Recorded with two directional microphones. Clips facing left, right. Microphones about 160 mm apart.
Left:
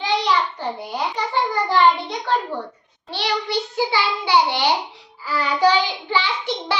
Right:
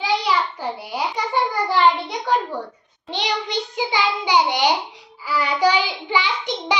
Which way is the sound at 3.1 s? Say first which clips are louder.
Left 1 dB; 20° right (ahead or behind).